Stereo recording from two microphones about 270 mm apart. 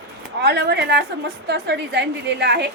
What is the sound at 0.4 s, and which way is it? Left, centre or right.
A woman's voice, right.